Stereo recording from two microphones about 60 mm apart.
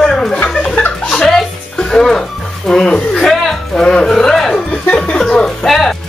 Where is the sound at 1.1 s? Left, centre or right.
Centre.